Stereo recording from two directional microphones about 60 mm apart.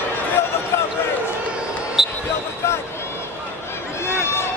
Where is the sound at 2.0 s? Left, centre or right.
Centre.